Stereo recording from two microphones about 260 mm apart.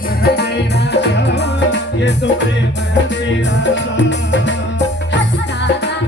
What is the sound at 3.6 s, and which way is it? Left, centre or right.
Music, left.